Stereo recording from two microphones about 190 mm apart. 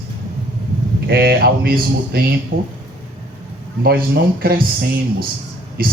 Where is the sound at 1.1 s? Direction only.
55° right (ahead or behind).